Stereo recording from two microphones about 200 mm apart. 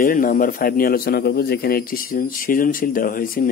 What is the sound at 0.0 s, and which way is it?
Speech, 45° left (ahead or behind).